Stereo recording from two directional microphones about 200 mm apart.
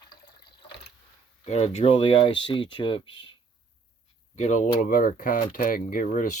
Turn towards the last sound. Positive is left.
turn(degrees=40)  # may be behind; listen again after turning